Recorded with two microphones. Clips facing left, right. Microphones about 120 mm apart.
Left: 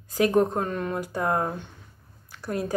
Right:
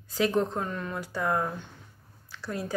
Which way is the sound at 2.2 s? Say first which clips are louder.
Left 5 dB; 50° left (ahead or behind).